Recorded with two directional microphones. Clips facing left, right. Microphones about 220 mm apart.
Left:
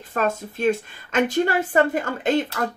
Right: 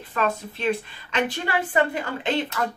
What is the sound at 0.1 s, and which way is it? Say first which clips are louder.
A woman's voice: left 2 dB; 45° left (ahead or behind).